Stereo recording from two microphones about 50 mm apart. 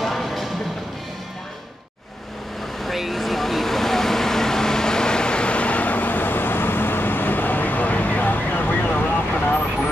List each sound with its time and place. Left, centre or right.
0.0 s music: centre
2.8 s vehicle: centre; by 9.4 s left